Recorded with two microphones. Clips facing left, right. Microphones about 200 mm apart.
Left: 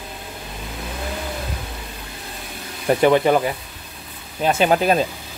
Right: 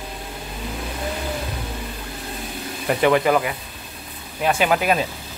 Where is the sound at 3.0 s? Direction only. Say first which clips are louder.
Left 2 dB; 25° left (ahead or behind).